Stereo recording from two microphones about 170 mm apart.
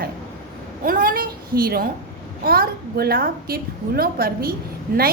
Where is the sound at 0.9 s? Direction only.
55° right (ahead or behind).